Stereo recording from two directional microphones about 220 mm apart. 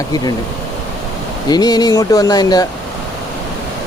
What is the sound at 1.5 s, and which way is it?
Speech, 15° left (ahead or behind).